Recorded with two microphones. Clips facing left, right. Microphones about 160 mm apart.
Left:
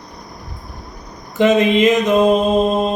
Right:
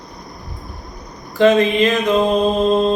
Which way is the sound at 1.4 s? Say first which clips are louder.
Even; 20° left (ahead or behind).